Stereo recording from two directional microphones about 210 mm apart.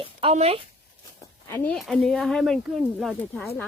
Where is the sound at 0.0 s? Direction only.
25° right (ahead or behind).